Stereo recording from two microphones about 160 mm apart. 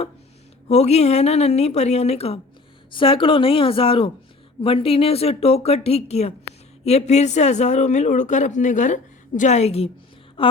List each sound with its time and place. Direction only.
0.7 s a woman's voice: 45° left (ahead or behind)